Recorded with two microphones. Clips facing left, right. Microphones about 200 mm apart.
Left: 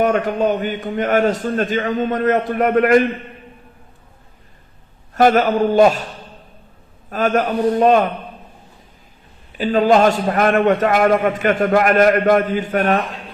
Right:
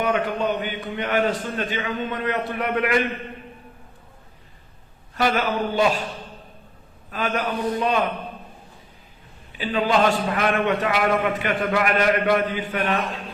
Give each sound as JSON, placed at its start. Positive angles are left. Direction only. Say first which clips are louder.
{"t": 0.0, "sound": "a man's voice", "louder": "left 6 dB", "side_deg": 45}
{"t": 5.1, "sound": "a man's voice", "louder": "left 8 dB", "side_deg": 45}
{"t": 7.1, "sound": "a man's voice", "louder": "left 8 dB", "side_deg": 45}
{"t": 9.6, "sound": "a man's voice", "louder": "left 7 dB", "side_deg": 45}